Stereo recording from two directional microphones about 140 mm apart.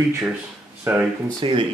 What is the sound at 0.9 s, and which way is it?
Speech, 20° right (ahead or behind).